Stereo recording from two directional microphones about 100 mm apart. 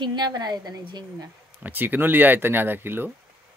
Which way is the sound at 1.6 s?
20° right (ahead or behind).